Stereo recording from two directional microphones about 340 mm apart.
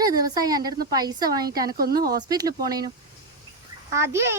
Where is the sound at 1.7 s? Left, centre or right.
Right.